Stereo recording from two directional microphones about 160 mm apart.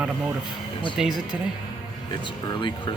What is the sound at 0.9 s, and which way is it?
Speech, 5° right (ahead or behind).